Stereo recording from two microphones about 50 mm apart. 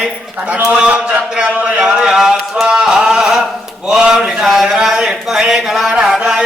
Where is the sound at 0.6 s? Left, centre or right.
Right.